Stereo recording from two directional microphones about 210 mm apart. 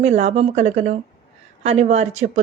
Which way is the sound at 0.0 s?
30° right (ahead or behind).